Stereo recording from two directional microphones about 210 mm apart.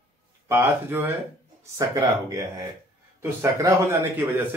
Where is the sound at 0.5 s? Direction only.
10° right (ahead or behind).